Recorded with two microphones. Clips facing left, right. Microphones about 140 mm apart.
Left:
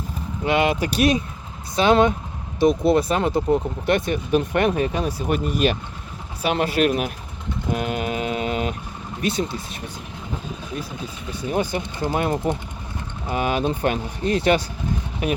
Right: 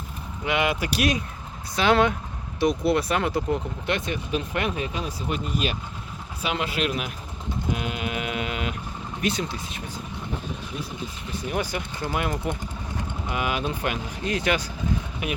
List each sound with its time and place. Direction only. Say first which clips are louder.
0.4 s speech: left 5 dB; 30° left (ahead or behind)
3.8 s speech: left 6 dB; 50° left (ahead or behind)
7.7 s a sound: left 6 dB; 45° left (ahead or behind)
11.4 s speech: left 5 dB; 30° left (ahead or behind)